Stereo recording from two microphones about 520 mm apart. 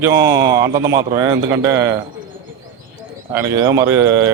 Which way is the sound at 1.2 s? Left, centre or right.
Right.